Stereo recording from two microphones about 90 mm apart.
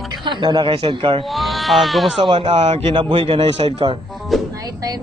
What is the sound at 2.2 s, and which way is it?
A man's voice, 70° right (ahead or behind).